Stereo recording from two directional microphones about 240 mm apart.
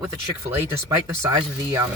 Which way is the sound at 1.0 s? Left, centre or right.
Centre.